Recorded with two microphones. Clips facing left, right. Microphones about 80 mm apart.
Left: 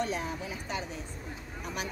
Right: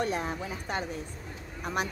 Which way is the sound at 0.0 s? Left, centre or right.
Right.